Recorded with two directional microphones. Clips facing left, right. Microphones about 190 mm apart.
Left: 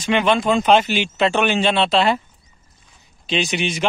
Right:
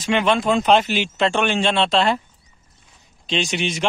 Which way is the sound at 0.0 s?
Centre (ahead or behind).